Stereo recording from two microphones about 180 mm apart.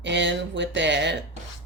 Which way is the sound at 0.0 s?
85° right.